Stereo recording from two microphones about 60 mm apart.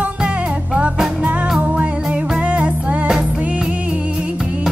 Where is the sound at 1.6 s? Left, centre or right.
Right.